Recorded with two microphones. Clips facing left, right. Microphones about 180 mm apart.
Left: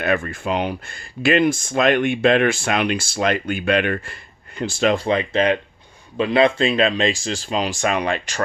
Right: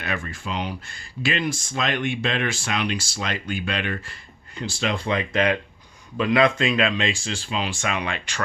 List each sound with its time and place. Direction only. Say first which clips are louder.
0.0 s speech: left 9 dB; 55° left (ahead or behind)
5.0 s speech: left 4 dB; 30° left (ahead or behind)